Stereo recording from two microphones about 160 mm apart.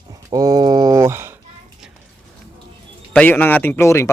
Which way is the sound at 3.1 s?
10° left (ahead or behind).